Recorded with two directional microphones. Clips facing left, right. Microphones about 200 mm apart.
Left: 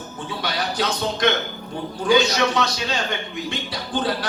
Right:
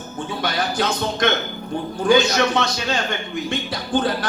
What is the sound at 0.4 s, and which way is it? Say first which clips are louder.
A man's voice: right 2 dB; 50° right (ahead or behind).